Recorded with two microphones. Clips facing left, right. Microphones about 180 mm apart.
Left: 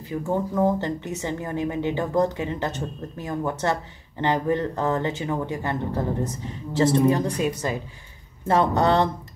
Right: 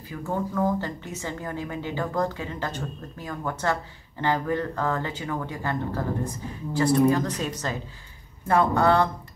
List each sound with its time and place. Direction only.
0.1 s speech: 25° left (ahead or behind)
8.5 s speech: 25° left (ahead or behind)